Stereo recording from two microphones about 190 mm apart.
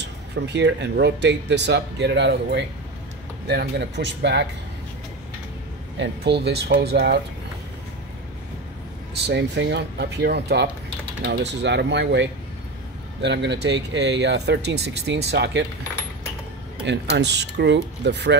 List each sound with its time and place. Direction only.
0.0 s speech: 65° right (ahead or behind)
5.9 s speech: 60° right (ahead or behind)
9.2 s speech: 65° right (ahead or behind)
16.8 s speech: 65° right (ahead or behind)